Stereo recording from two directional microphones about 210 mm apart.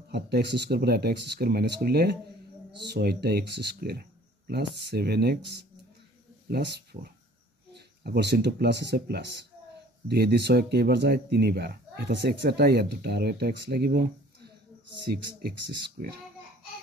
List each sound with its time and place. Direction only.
0.1 s speech: 55° right (ahead or behind)
16.0 s speech: 45° right (ahead or behind)